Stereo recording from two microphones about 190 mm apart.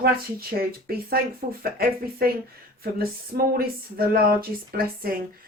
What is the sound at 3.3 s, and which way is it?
Speech, 50° right (ahead or behind).